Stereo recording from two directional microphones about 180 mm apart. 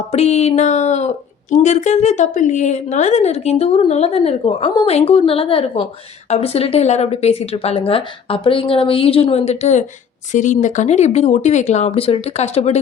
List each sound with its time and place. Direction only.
0.1 s speech: 35° left (ahead or behind)